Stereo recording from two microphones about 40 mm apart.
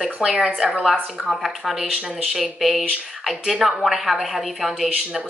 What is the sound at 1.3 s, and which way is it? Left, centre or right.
Speech, centre.